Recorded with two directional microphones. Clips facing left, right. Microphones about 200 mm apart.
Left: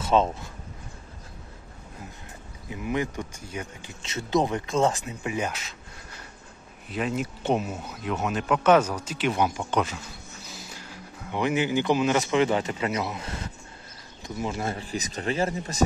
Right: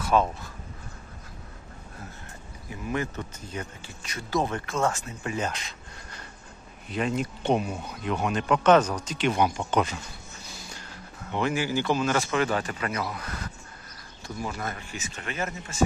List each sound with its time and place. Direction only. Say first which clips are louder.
0.0 s speech: left 1 dB; 25° left (ahead or behind)
2.7 s speech: left 2 dB; 15° left (ahead or behind)
4.0 s speech: left 3 dB; 25° left (ahead or behind)